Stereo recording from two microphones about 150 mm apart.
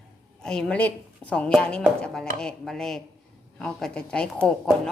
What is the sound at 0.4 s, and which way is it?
A woman's voice, 5° left (ahead or behind).